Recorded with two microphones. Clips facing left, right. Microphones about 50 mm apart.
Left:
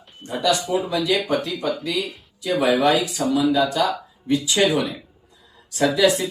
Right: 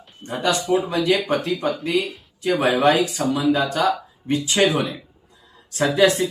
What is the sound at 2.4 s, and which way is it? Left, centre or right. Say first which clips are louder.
Speech: right 1 dB; right.